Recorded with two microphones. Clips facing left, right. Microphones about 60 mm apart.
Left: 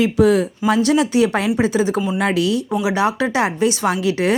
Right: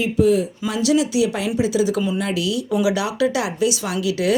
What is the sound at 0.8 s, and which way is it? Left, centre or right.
Speech, left.